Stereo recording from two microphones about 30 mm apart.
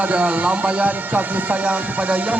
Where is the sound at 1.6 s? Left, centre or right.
Right.